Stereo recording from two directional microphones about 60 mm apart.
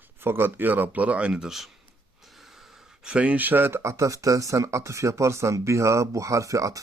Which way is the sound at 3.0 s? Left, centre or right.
Centre.